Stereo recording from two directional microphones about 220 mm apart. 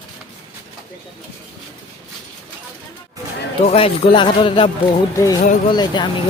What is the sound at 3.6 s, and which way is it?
A man's voice, 25° left (ahead or behind).